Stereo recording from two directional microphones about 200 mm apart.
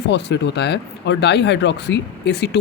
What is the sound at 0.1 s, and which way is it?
Speech, 60° left (ahead or behind).